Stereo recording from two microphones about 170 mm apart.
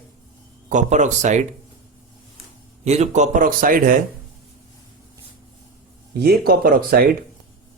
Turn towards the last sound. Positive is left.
turn(degrees=-60)  # may be behind; listen again after turning